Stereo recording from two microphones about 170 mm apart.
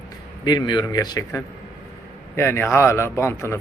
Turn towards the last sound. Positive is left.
turn(degrees=15)  # may be behind; listen again after turning